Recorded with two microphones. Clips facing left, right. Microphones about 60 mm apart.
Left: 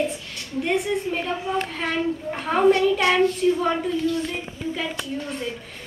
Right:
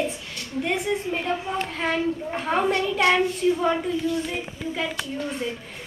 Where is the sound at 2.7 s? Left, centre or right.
Right.